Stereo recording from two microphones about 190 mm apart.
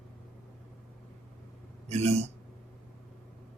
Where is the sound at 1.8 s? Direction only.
35° right (ahead or behind).